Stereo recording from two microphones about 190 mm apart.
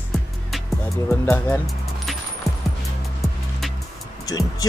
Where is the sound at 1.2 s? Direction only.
10° left (ahead or behind).